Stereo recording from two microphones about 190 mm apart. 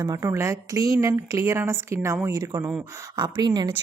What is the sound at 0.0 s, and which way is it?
Speech, 20° right (ahead or behind).